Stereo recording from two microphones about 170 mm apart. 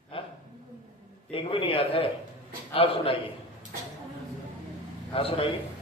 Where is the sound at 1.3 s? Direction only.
35° left (ahead or behind).